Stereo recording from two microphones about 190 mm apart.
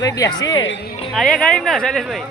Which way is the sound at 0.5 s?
75° left (ahead or behind).